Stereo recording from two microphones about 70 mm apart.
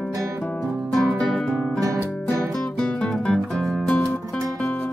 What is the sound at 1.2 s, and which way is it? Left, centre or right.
Music, centre.